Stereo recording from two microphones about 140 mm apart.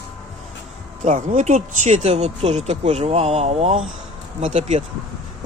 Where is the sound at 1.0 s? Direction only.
60° right (ahead or behind).